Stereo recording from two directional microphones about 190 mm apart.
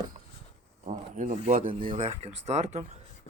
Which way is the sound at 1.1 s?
40° right (ahead or behind).